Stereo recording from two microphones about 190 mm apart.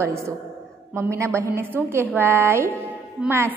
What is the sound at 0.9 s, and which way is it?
A woman's voice, 15° right (ahead or behind).